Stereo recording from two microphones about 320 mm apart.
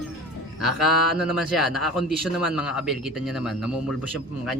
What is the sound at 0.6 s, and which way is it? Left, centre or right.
A man's voice, centre.